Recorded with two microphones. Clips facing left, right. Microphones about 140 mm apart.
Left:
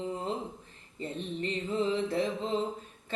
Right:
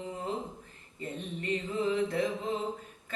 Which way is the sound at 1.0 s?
30° left (ahead or behind).